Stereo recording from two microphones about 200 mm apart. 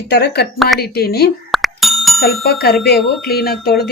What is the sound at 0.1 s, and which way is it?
A woman's voice, 55° left (ahead or behind).